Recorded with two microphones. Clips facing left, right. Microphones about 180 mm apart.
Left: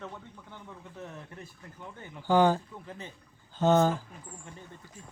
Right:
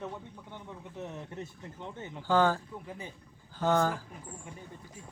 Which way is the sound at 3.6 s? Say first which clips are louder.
Left 4 dB; 20° left (ahead or behind).